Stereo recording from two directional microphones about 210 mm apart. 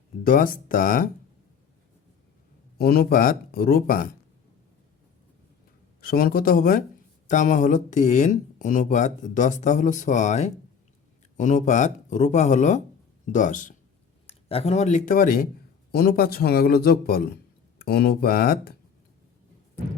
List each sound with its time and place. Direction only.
0.3 s speech: 40° left (ahead or behind)
2.7 s speech: 45° left (ahead or behind)
6.0 s speech: 45° left (ahead or behind)